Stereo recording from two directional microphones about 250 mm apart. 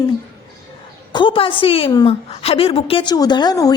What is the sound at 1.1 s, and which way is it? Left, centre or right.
A woman's voice, centre.